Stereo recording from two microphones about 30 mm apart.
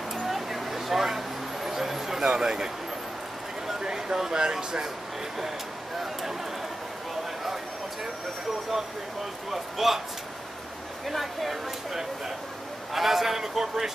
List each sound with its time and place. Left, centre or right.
0.3 s vehicle: centre
3.9 s speech: right
9.5 s a man's voice: centre
11.1 s speech: centre
12.9 s a man's voice: centre